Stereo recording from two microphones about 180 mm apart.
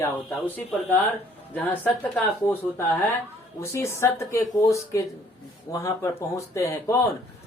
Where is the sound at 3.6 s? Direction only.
15° left (ahead or behind).